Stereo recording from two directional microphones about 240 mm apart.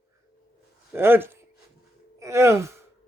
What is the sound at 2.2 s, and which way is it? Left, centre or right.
Gasp, centre.